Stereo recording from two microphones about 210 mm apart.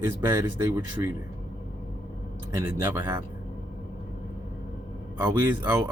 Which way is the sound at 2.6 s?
10° right (ahead or behind).